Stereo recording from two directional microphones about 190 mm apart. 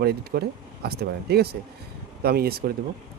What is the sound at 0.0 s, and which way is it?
Speech, 55° right (ahead or behind).